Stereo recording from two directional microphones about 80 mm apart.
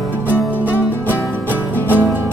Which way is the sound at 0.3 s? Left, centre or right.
Left.